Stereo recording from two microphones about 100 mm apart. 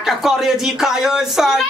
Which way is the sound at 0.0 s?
5° right (ahead or behind).